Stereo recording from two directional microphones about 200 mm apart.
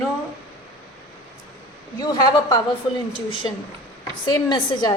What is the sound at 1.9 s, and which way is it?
Speech, 20° left (ahead or behind).